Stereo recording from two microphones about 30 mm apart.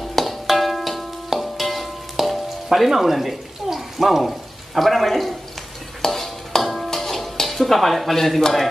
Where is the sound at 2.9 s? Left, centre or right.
Centre.